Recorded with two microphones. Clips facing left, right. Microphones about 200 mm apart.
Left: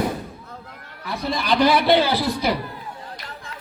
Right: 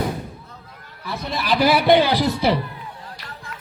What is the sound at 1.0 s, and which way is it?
A man's voice, centre (ahead or behind).